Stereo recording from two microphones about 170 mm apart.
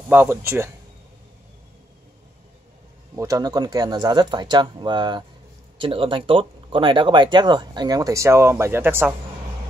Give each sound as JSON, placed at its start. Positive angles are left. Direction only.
{"t": 0.1, "sound": "speech", "side_deg": -15}
{"t": 3.2, "sound": "speech", "side_deg": -20}